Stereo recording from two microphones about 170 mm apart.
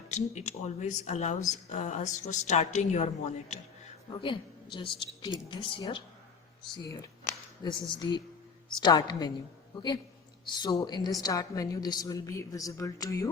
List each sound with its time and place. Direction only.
0.1 s a woman's voice: 45° left (ahead or behind)
4.1 s a woman's voice: 30° left (ahead or behind)